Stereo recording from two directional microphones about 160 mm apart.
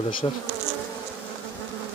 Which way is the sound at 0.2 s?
30° left (ahead or behind).